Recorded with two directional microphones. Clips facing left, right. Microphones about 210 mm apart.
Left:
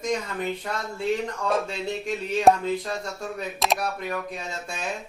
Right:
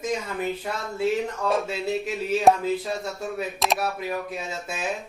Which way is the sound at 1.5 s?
5° right (ahead or behind).